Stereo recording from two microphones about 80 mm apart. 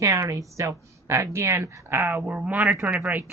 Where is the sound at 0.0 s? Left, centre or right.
Right.